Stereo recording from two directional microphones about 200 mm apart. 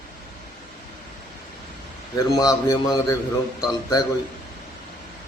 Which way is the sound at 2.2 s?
15° left (ahead or behind).